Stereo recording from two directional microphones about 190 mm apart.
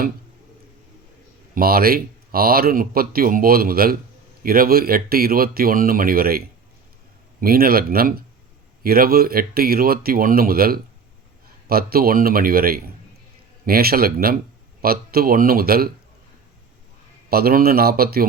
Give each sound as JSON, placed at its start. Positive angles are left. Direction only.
{"t": 1.5, "sound": "speech", "side_deg": -50}
{"t": 17.2, "sound": "speech", "side_deg": -50}